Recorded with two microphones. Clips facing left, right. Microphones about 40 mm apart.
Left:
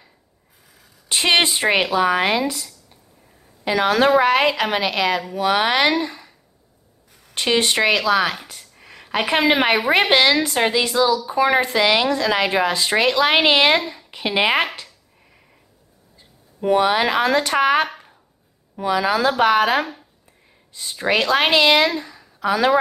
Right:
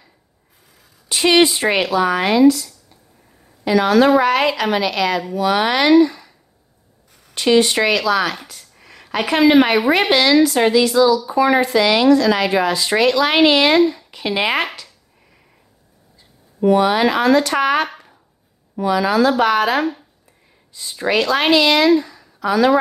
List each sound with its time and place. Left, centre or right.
1.0 s speech: left
1.6 s speech: centre
7.3 s speech: left
7.7 s speech: left
8.8 s a sound: centre
9.5 s a woman's voice: centre
13.9 s a woman's voice: centre
16.6 s speech: left
22.0 s a sound: left